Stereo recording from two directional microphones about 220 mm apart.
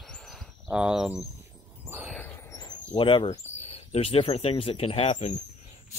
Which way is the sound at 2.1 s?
15° left (ahead or behind).